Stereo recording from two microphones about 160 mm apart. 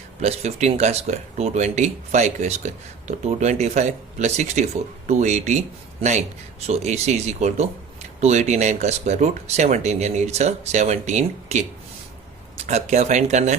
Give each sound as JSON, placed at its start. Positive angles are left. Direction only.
{"t": 0.2, "sound": "speech", "side_deg": -45}
{"t": 12.6, "sound": "speech", "side_deg": -45}